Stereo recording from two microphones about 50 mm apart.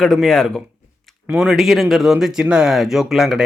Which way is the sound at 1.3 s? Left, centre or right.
Centre.